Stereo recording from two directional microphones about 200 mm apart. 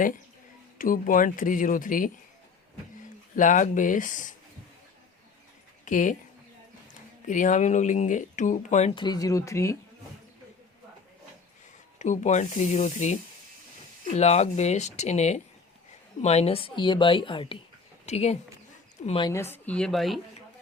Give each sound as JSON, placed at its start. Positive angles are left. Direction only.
{"t": 0.8, "sound": "speech", "side_deg": 45}
{"t": 3.3, "sound": "speech", "side_deg": 40}
{"t": 5.8, "sound": "speech", "side_deg": 40}
{"t": 7.3, "sound": "speech", "side_deg": 40}
{"t": 8.9, "sound": "speech", "side_deg": 20}
{"t": 11.9, "sound": "speech", "side_deg": 35}
{"t": 14.2, "sound": "a woman's voice", "side_deg": 35}
{"t": 19.3, "sound": "a woman's voice", "side_deg": 10}